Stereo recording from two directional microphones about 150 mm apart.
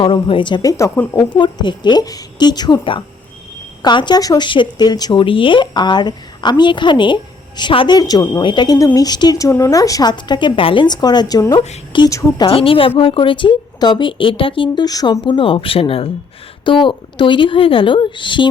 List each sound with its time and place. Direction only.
0.0 s speech: 35° left (ahead or behind)
12.5 s speech: 35° left (ahead or behind)